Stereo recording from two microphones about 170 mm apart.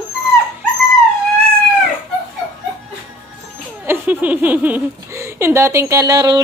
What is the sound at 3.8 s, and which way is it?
A woman's voice, 10° right (ahead or behind).